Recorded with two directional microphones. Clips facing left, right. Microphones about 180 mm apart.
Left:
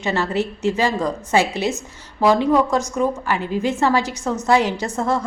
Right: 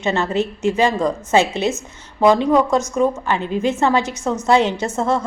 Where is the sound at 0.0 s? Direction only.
20° right (ahead or behind).